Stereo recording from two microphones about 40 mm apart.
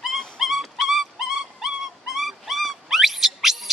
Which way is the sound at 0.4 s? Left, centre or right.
Centre.